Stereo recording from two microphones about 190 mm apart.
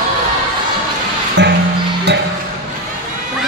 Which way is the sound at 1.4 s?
65° right (ahead or behind).